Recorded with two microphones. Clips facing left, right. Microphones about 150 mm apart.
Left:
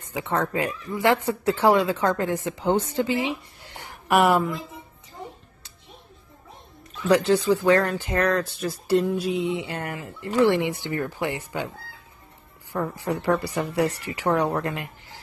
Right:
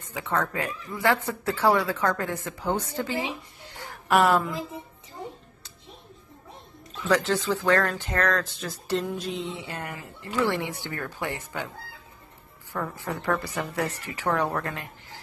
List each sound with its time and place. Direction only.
0.1 s a woman's voice: 20° left (ahead or behind)
7.1 s speech: 15° left (ahead or behind)
9.0 s a sound: 5° left (ahead or behind)
9.5 s speech: 20° left (ahead or behind)
12.7 s speech: 20° left (ahead or behind)